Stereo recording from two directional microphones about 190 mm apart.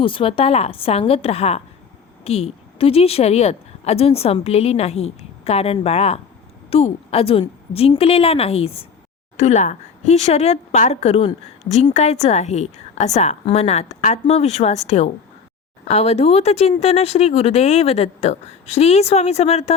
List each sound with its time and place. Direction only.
0.0 s a woman's voice: 25° left (ahead or behind)